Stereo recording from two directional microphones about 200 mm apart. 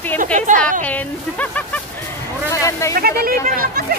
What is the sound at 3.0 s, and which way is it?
Speech, 50° right (ahead or behind).